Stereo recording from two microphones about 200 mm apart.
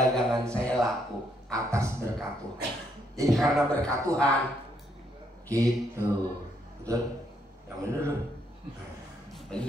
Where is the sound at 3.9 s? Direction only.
15° right (ahead or behind).